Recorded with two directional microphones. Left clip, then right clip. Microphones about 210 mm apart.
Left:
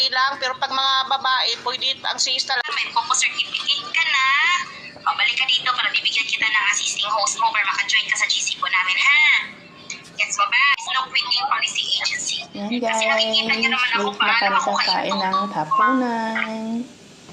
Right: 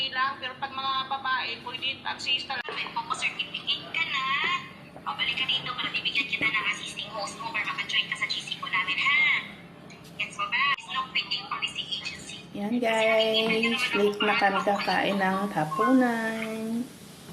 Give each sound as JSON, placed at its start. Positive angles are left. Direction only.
{"t": 0.0, "sound": "a woman's voice", "side_deg": 45}
{"t": 14.8, "sound": "speech", "side_deg": 0}